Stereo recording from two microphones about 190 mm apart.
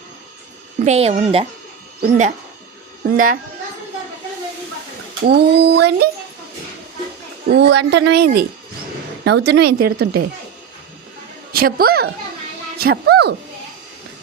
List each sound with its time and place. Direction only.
0.9 s a child's voice: 35° right (ahead or behind)
5.2 s a woman's voice: 60° right (ahead or behind)
7.4 s a woman's voice: 65° right (ahead or behind)
11.5 s a woman's voice: 50° right (ahead or behind)